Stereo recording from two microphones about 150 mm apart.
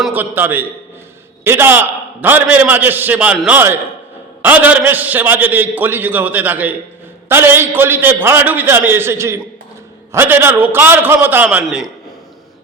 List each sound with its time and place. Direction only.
0.0 s a man's voice: 10° right (ahead or behind)